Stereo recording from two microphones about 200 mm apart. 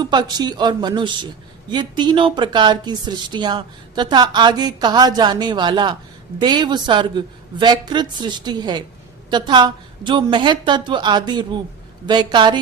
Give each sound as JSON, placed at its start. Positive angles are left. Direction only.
{"t": 0.0, "sound": "speech", "side_deg": -20}